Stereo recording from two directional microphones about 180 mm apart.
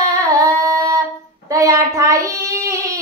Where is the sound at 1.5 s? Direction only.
20° right (ahead or behind).